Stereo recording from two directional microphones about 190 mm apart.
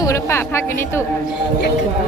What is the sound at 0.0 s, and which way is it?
A woman's voice, 15° left (ahead or behind).